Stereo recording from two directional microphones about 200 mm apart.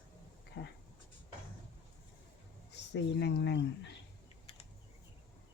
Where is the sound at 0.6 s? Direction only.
50° left (ahead or behind).